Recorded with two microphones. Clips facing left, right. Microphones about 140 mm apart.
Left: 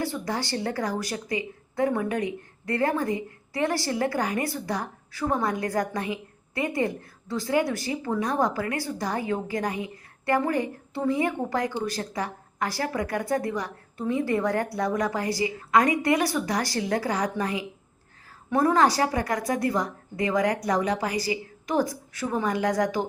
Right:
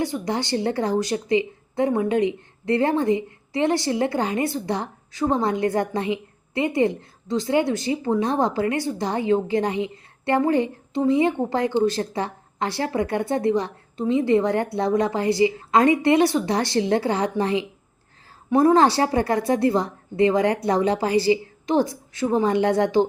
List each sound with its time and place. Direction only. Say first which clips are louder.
0.0 s a woman's voice: right 4 dB; 20° right (ahead or behind)